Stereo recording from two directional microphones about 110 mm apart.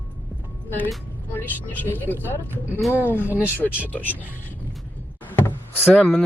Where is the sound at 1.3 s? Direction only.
15° left (ahead or behind).